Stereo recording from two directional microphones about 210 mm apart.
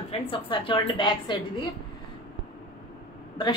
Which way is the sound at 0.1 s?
25° left (ahead or behind).